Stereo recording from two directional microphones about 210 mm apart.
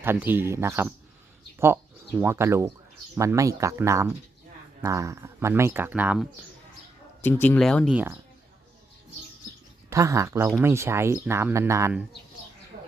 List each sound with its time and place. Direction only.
0.0 s speech: 10° right (ahead or behind)
7.4 s speech: 5° left (ahead or behind)
7.9 s speech: 10° right (ahead or behind)
9.9 s speech: 15° right (ahead or behind)
12.7 s a sound: 40° right (ahead or behind)